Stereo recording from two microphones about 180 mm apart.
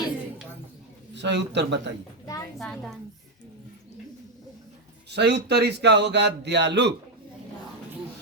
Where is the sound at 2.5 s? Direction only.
Centre (ahead or behind).